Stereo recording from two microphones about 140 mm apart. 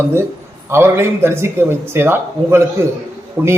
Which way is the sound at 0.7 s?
15° right (ahead or behind).